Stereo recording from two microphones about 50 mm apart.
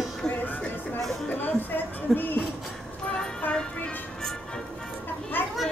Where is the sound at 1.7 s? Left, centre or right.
Left.